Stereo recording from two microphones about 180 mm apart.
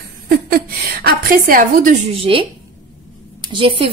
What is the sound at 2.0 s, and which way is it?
Speech, 30° right (ahead or behind).